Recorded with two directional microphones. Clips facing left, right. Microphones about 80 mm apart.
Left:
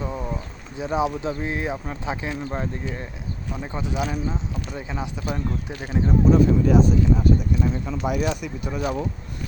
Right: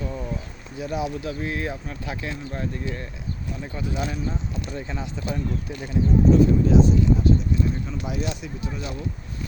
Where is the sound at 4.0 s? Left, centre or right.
Centre.